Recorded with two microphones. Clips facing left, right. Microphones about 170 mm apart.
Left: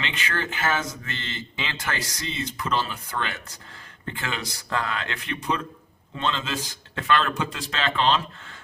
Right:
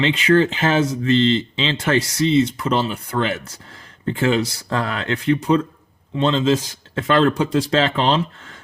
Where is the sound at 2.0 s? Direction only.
80° right.